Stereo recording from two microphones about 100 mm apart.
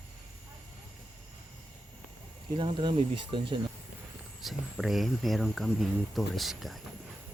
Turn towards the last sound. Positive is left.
turn(degrees=0)  # may be behind; listen again after turning